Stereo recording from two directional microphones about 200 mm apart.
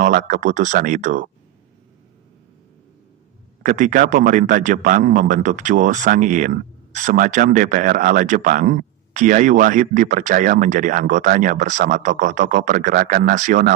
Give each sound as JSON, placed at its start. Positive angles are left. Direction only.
{"t": 0.0, "sound": "a man's voice", "side_deg": -40}
{"t": 3.6, "sound": "a man's voice", "side_deg": -40}